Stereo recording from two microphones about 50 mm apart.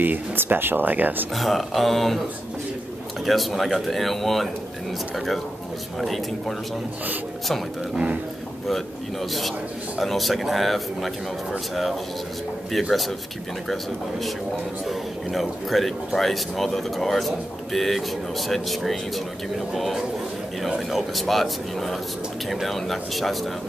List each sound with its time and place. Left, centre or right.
0.0 s speech: right
1.3 s a man's voice: centre
3.3 s a man's voice: centre
8.6 s a man's voice: centre
14.9 s a man's voice: centre